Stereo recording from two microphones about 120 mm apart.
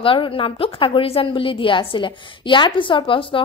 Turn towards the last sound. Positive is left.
turn(degrees=45)  # may be behind; listen again after turning